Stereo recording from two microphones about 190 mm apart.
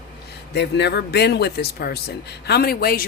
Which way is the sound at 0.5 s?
60° left (ahead or behind).